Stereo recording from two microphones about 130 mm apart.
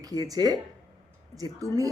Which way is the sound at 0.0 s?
30° right (ahead or behind).